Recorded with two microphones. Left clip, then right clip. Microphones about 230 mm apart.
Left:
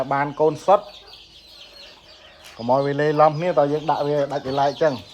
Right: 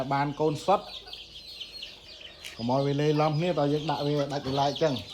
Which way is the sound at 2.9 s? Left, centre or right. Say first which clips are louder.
Left 10 dB; left.